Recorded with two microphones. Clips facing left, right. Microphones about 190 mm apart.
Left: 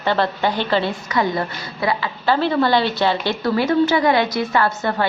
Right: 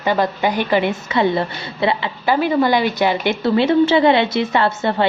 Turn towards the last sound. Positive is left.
turn(degrees=-25)  # may be behind; listen again after turning